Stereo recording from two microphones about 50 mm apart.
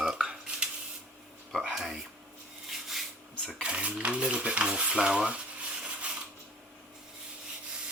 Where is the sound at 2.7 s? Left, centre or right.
Centre.